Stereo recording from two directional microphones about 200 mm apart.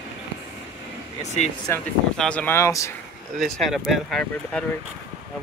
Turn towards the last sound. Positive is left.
turn(degrees=5)  # may be behind; listen again after turning